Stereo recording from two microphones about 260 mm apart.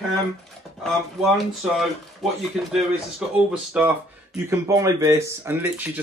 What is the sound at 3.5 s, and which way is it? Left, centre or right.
Speech, centre.